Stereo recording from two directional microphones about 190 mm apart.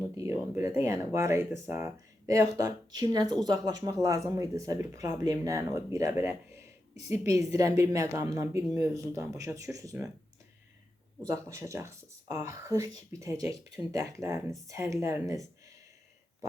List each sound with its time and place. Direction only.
0.5 s speech: 10° right (ahead or behind)
6.9 s a woman's voice: 35° left (ahead or behind)
7.3 s speech: 15° right (ahead or behind)
11.2 s speech: 15° right (ahead or behind)